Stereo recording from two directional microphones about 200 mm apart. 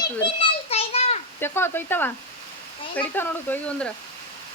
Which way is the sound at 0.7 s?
30° left (ahead or behind).